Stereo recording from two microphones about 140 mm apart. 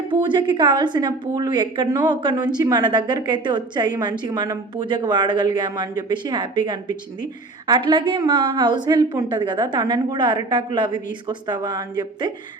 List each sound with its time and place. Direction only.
0.1 s a woman's voice: 35° right (ahead or behind)